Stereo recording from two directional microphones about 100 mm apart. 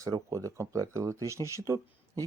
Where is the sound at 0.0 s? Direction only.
35° right (ahead or behind).